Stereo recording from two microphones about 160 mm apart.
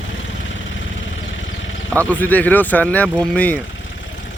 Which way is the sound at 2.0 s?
10° left (ahead or behind).